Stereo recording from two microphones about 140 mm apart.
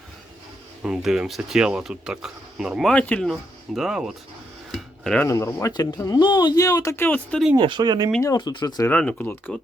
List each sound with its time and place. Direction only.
0.8 s speech: 5° right (ahead or behind)
2.9 s speech: 10° left (ahead or behind)
3.8 s speech: centre (ahead or behind)
4.7 s dishes: 5° left (ahead or behind)
5.2 s speech: 20° left (ahead or behind)
7.5 s speech: 30° right (ahead or behind)
8.2 s speech: 25° left (ahead or behind)
8.9 s speech: 10° left (ahead or behind)